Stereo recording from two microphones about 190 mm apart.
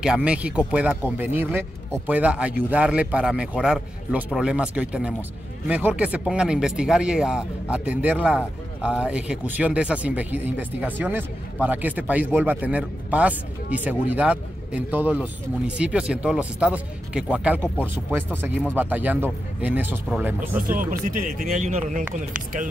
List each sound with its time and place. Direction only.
0.0 s a man's voice: 5° right (ahead or behind)
18.8 s a man's voice: 10° right (ahead or behind)
21.0 s speech: 40° right (ahead or behind)